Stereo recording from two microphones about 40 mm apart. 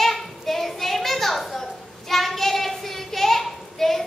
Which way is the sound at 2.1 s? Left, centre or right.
Centre.